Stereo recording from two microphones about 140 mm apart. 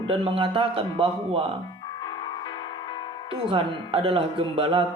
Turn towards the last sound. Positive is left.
turn(degrees=-40)  # may be behind; listen again after turning